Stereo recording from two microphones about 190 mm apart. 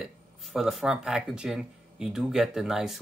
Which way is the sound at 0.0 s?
Centre (ahead or behind).